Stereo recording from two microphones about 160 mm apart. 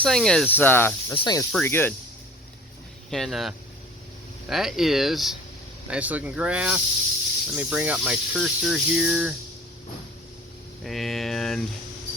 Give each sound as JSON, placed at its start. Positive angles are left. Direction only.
{"t": 0.0, "sound": "speech", "side_deg": 5}
{"t": 1.2, "sound": "speech", "side_deg": 25}
{"t": 1.5, "sound": "speech", "side_deg": 15}
{"t": 3.1, "sound": "speech", "side_deg": 0}
{"t": 10.8, "sound": "speech", "side_deg": 0}